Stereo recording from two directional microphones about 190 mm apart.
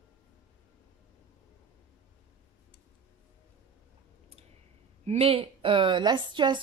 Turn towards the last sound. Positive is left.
turn(degrees=-25)  # may be behind; listen again after turning